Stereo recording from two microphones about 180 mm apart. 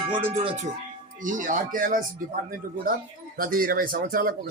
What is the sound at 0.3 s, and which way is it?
Speech, 35° right (ahead or behind).